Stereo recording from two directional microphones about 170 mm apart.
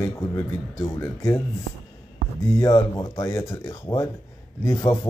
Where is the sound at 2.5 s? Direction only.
20° left (ahead or behind).